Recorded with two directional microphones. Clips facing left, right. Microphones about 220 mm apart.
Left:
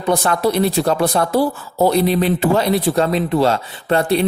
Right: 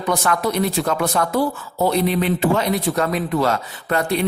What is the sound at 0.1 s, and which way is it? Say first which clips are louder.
Speech: left 4 dB; 30° left (ahead or behind).